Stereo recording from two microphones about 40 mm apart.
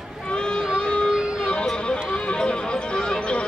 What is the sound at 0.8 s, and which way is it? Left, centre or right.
Music, left.